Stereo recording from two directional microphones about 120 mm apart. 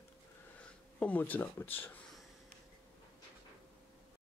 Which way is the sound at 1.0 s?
15° left (ahead or behind).